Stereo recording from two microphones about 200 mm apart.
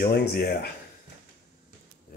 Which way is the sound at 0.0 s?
50° left (ahead or behind).